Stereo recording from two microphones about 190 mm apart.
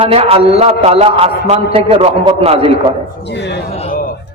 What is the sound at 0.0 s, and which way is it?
A man's voice, 30° right (ahead or behind).